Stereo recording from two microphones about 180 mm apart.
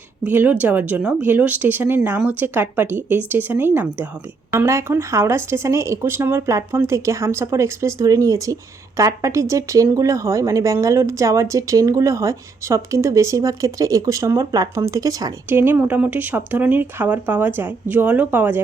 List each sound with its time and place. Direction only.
0.3 s speech: 10° right (ahead or behind)